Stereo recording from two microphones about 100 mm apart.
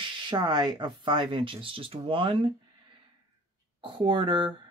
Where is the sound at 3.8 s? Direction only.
60° right (ahead or behind).